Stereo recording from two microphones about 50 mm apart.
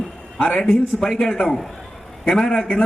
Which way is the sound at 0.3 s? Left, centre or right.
Left.